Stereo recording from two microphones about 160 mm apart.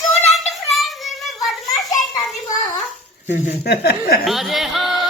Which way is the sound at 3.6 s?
80° left.